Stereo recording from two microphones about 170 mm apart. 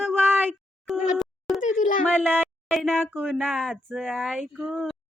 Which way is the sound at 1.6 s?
45° left (ahead or behind).